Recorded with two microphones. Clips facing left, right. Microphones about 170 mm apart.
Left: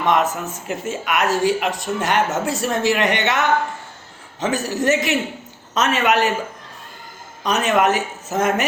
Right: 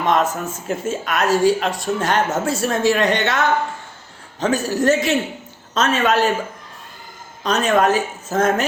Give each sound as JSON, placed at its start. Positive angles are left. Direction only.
{"t": 0.1, "sound": "a man's voice", "side_deg": 20}
{"t": 7.4, "sound": "speech", "side_deg": 20}